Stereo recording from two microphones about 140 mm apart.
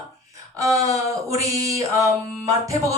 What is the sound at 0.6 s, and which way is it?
Speech, 25° right (ahead or behind).